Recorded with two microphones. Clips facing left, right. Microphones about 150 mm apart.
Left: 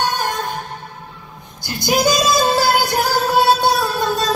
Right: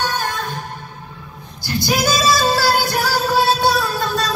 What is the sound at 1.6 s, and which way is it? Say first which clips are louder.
Music: left 2 dB; 20° left (ahead or behind).